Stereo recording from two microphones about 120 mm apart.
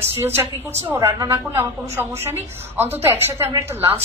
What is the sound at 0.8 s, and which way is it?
A woman's voice, 20° right (ahead or behind).